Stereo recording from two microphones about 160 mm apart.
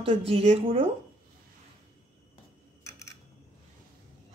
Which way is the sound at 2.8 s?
20° left (ahead or behind).